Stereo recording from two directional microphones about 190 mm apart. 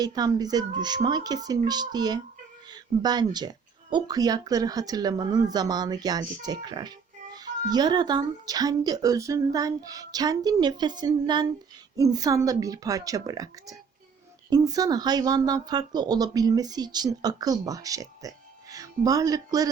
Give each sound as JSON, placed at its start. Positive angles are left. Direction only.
{"t": 0.0, "sound": "speech", "side_deg": -20}